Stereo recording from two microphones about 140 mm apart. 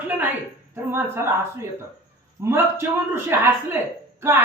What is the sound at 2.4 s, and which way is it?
Speech, 20° right (ahead or behind).